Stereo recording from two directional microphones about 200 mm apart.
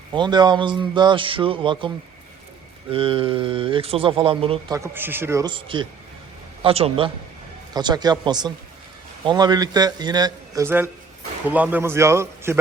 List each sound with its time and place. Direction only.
0.1 s speech: 20° right (ahead or behind)
2.9 s speech: 25° right (ahead or behind)
4.8 s a man's voice: 10° right (ahead or behind)